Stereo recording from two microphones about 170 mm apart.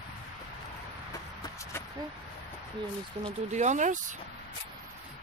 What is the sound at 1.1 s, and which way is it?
Shuffle, 20° left (ahead or behind).